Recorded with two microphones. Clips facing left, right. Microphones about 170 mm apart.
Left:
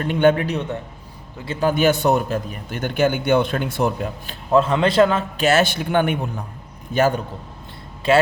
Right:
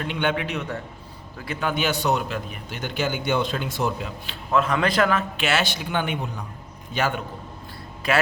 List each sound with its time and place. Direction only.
0.0 s a man's voice: 45° left (ahead or behind)
4.5 s a man's voice: 30° left (ahead or behind)
5.4 s a man's voice: 45° left (ahead or behind)
6.9 s a man's voice: 40° left (ahead or behind)
8.0 s a man's voice: 25° left (ahead or behind)